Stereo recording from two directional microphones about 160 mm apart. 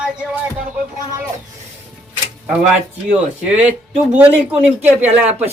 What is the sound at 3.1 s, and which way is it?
A woman's voice, 10° right (ahead or behind).